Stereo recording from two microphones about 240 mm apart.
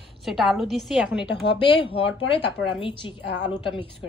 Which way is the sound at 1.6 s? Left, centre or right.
Left.